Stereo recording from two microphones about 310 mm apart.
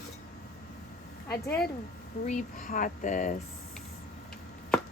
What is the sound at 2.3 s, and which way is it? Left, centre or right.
Speech, left.